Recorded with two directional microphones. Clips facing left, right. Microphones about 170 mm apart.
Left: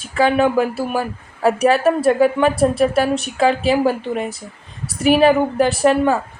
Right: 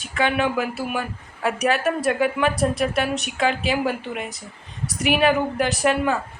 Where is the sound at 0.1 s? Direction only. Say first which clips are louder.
Left 6 dB; 35° left (ahead or behind).